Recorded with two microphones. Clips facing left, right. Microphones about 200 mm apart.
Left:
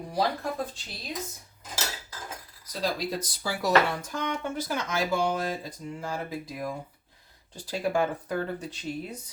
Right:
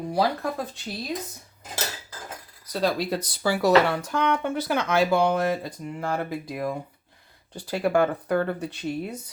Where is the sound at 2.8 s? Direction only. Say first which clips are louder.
Right 5 dB; 65° right (ahead or behind).